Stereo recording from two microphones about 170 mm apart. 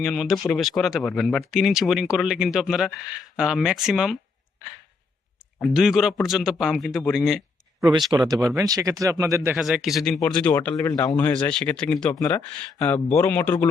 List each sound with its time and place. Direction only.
0.0 s speech: centre (ahead or behind)
5.7 s speech: 5° right (ahead or behind)
7.8 s speech: 20° right (ahead or behind)
9.6 s speech: centre (ahead or behind)